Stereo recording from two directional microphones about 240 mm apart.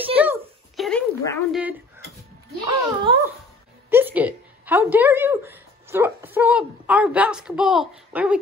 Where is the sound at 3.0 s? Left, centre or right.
Centre.